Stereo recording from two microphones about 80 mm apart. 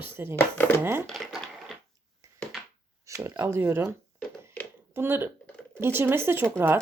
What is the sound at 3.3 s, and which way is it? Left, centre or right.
Speech, right.